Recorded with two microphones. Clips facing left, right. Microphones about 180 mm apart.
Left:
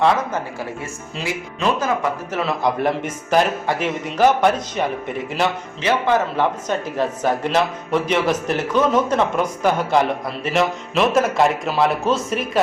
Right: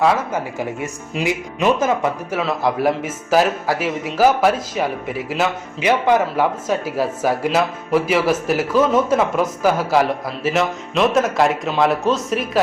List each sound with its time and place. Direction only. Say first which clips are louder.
0.8 s speech: right 5 dB; 20° right (ahead or behind)
2.3 s speech: even; centre (ahead or behind)
5.8 s speech: right 2 dB; 15° right (ahead or behind)